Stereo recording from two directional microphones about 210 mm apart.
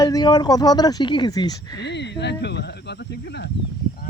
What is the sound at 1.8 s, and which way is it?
Speech, 55° left (ahead or behind).